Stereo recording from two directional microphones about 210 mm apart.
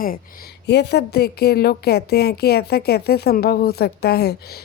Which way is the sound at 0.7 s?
55° left (ahead or behind).